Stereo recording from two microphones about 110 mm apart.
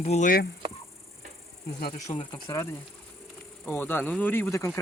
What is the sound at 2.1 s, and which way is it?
Speech, 45° left (ahead or behind).